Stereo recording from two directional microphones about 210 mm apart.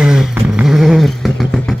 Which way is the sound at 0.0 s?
5° right (ahead or behind).